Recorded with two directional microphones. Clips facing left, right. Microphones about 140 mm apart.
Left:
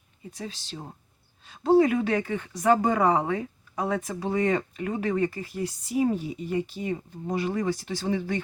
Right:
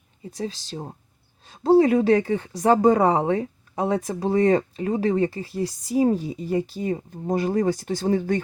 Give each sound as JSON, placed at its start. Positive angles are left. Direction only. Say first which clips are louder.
{"t": 0.3, "sound": "speech", "louder": "right 7 dB", "side_deg": -35}